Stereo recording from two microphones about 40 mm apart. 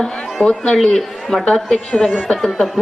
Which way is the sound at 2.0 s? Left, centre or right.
Centre.